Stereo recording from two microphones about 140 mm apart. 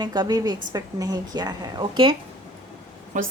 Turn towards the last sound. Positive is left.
turn(degrees=-65)  # may be behind; listen again after turning